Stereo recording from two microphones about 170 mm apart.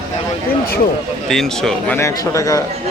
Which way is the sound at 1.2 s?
Centre (ahead or behind).